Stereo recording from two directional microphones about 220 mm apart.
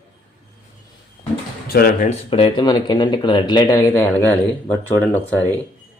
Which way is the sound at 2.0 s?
25° left (ahead or behind).